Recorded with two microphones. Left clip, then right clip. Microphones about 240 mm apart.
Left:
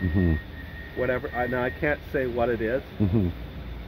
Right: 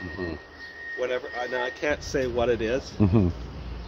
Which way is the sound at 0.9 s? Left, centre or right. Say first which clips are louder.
Left 2 dB; centre.